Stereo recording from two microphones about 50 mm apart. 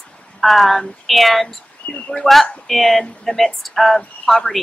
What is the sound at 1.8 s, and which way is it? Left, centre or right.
Speech, left.